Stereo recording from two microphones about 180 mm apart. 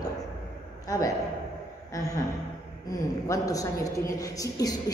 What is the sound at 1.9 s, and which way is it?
A woman's voice, 20° left (ahead or behind).